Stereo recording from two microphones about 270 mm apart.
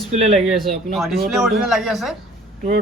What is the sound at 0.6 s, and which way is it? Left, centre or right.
Speech, centre.